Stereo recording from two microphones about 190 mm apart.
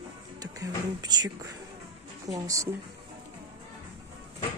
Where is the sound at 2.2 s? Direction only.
20° right (ahead or behind).